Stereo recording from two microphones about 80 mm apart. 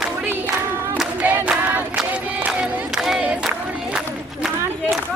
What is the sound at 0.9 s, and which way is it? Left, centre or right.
Choir, centre.